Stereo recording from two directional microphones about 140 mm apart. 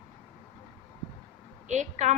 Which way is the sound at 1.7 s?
55° right (ahead or behind).